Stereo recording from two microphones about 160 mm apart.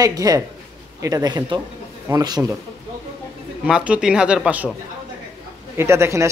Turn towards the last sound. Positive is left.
turn(degrees=-15)  # may be behind; listen again after turning